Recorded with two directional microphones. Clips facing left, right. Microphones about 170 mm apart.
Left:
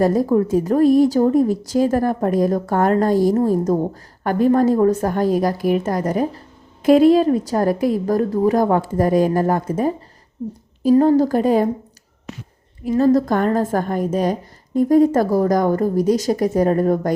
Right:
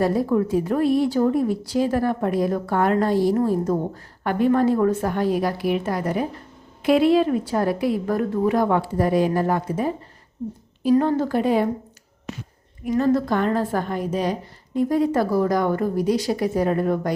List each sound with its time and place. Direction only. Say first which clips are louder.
0.0 s a woman's voice: left 4 dB; 40° left (ahead or behind)
12.8 s a woman's voice: left 4 dB; 35° left (ahead or behind)